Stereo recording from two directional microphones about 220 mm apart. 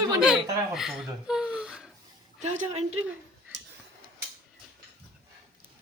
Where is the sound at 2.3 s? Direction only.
30° right (ahead or behind).